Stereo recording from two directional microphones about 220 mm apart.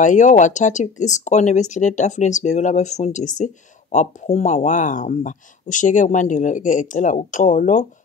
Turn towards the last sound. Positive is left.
turn(degrees=35)  # may be behind; listen again after turning